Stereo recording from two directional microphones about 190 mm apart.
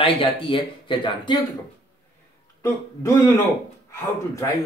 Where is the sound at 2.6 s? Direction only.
15° left (ahead or behind).